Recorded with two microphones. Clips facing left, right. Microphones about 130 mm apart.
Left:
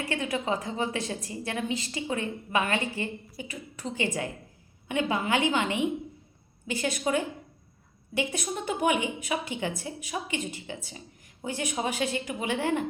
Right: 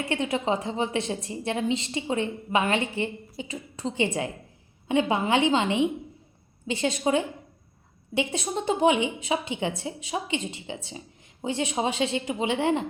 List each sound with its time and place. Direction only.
0.0 s a woman's voice: 25° right (ahead or behind)